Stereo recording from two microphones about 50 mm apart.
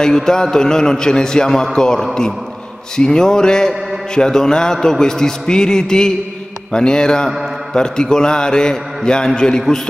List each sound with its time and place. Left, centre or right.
0.0 s a man's voice: centre